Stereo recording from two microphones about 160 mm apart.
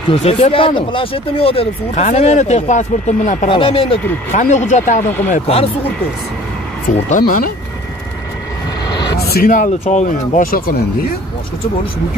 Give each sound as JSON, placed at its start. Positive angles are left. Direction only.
{"t": 0.1, "sound": "speech", "side_deg": 40}
{"t": 3.4, "sound": "speech", "side_deg": 35}
{"t": 4.4, "sound": "speech", "side_deg": 50}
{"t": 5.0, "sound": "speech", "side_deg": 15}
{"t": 5.3, "sound": "speech", "side_deg": 40}
{"t": 7.1, "sound": "speech", "side_deg": 60}
{"t": 9.2, "sound": "speech", "side_deg": 70}